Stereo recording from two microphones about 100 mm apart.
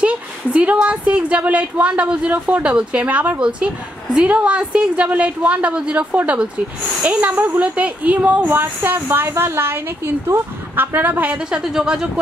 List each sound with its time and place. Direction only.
0.0 s a woman's voice: 10° right (ahead or behind)